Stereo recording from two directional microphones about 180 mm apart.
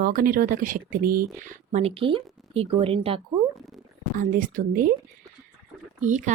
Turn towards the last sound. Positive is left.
turn(degrees=-45)  # may be behind; listen again after turning